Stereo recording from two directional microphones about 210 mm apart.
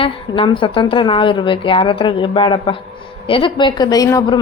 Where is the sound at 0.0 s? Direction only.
25° left (ahead or behind).